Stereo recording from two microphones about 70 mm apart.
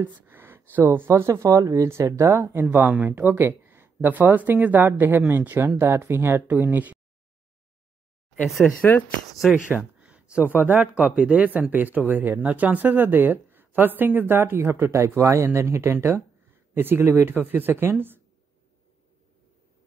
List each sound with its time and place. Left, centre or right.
0.0 s speech: right
8.5 s speech: centre
9.7 s speech: centre; by 18.2 s right